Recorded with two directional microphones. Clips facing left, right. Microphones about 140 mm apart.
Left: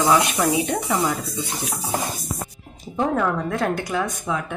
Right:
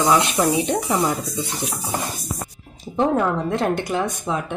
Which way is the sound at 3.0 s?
20° right (ahead or behind).